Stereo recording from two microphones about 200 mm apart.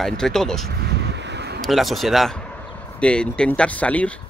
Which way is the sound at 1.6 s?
Centre (ahead or behind).